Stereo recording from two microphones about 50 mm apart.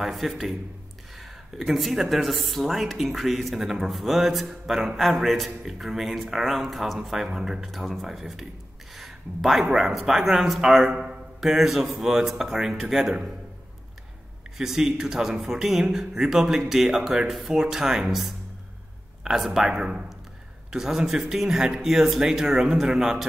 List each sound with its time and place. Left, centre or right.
0.0 s speech: centre
1.6 s speech: centre
8.9 s a sound: centre
9.8 s speech: centre
14.6 s speech: centre